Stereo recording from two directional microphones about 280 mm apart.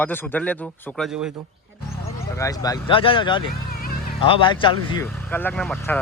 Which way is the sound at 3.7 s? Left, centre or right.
Left.